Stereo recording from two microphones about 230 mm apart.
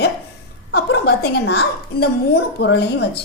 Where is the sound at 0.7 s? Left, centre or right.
Left.